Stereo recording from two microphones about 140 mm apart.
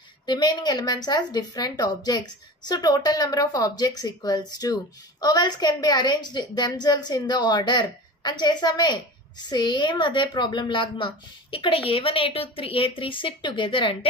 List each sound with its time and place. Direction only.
0.3 s a woman's voice: 30° left (ahead or behind)